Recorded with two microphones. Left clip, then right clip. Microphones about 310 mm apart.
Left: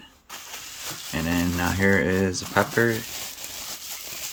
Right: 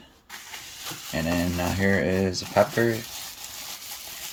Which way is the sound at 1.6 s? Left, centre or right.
Left.